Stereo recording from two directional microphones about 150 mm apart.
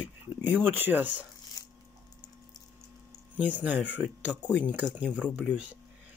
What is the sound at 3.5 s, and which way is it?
Speech, 10° right (ahead or behind).